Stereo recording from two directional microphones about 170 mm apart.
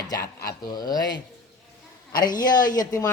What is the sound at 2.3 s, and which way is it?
Speech, 25° left (ahead or behind).